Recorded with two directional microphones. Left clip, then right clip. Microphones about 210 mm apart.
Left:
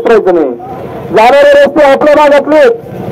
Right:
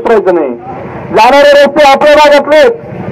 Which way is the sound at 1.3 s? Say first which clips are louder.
Right 1 dB; 25° left (ahead or behind).